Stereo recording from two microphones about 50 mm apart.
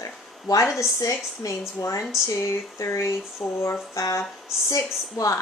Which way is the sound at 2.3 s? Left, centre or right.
Left.